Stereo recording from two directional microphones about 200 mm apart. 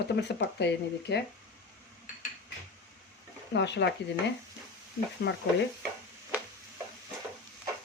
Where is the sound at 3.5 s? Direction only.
60° left (ahead or behind).